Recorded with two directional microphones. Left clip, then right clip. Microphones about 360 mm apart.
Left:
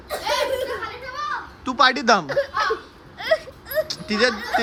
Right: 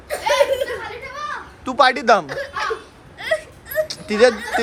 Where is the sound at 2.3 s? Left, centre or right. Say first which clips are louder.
Left 3 dB; left.